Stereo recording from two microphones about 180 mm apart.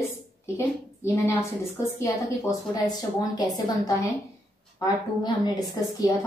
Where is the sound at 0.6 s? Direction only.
15° left (ahead or behind).